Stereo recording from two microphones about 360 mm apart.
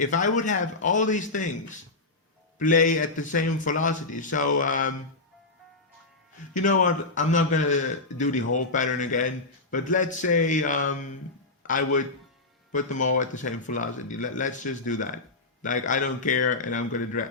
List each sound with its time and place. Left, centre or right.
0.0 s speech: left
2.8 s speech: left
6.8 s speech: left